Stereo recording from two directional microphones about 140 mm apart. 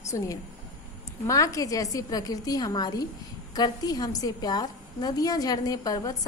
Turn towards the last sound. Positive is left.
turn(degrees=25)  # may be behind; listen again after turning